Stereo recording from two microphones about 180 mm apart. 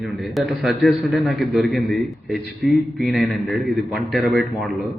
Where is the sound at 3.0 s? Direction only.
Centre (ahead or behind).